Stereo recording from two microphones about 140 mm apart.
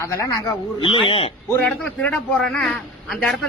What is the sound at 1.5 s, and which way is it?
A man's voice, 10° left (ahead or behind).